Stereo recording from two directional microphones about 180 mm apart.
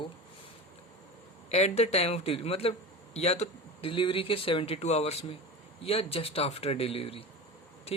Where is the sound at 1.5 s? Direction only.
35° left (ahead or behind).